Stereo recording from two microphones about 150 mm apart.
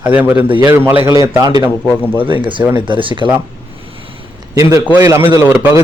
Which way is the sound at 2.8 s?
35° right (ahead or behind).